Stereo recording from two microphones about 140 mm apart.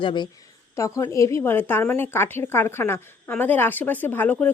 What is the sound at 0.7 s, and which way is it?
Speech, 20° left (ahead or behind).